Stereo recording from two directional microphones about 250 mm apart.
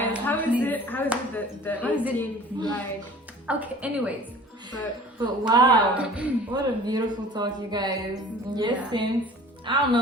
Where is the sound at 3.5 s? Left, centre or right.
Centre.